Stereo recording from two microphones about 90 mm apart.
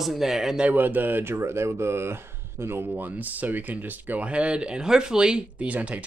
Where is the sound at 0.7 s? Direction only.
20° right (ahead or behind).